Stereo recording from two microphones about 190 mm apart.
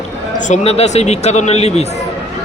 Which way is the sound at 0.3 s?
40° left (ahead or behind).